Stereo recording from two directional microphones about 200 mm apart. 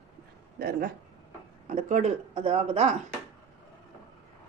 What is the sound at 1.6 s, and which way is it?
Speech, 35° right (ahead or behind).